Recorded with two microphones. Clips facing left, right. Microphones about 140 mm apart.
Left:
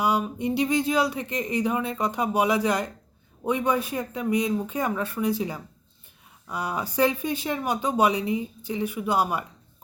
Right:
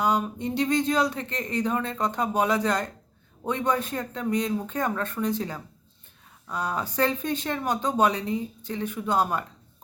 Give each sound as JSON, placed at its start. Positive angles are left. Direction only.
{"t": 0.0, "sound": "speech", "side_deg": 10}